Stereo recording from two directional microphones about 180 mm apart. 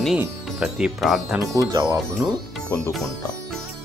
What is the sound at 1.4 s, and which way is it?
Speech, 20° right (ahead or behind).